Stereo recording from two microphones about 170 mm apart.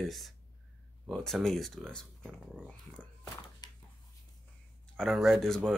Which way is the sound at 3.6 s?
25° left (ahead or behind).